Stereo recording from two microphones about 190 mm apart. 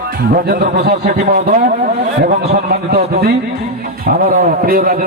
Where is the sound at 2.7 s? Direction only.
55° right (ahead or behind).